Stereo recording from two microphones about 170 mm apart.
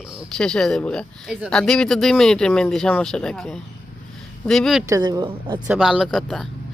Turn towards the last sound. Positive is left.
turn(degrees=0)  # may be behind; listen again after turning